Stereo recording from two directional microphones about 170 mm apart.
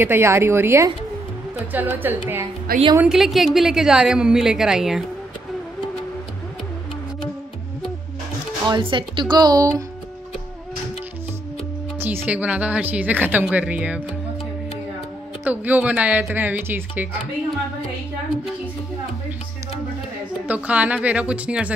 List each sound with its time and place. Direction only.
0.0 s a woman's voice: 15° right (ahead or behind)
8.6 s speech: 25° right (ahead or behind)
12.0 s speech: 15° right (ahead or behind)
15.4 s speech: 10° right (ahead or behind)
20.4 s speech: 10° right (ahead or behind)